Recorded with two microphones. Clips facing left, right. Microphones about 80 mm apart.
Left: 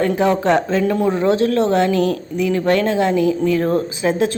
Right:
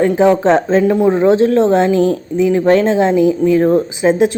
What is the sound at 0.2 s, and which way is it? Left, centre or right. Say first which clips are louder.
A woman's voice: right 5 dB; right.